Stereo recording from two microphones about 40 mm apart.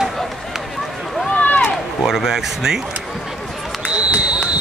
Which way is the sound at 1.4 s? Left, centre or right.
Left.